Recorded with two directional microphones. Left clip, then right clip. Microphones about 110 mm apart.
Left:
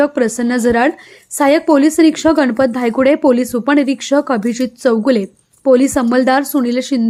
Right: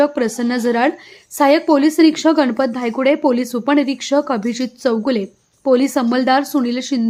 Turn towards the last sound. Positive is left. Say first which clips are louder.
# left 3 dB
turn(degrees=35)  # may be behind; listen again after turning